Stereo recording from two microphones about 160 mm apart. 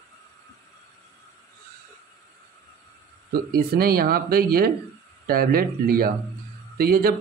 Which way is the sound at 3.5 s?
70° right (ahead or behind).